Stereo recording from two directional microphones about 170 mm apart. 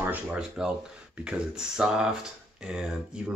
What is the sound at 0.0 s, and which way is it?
Speech, 10° right (ahead or behind).